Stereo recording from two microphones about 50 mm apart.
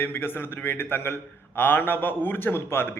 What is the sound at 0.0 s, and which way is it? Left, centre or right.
Speech, left.